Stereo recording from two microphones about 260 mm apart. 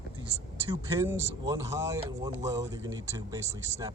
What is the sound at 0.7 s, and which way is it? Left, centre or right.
Speech, centre.